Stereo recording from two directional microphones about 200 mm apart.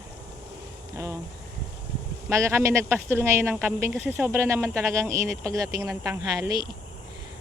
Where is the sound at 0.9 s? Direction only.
15° right (ahead or behind).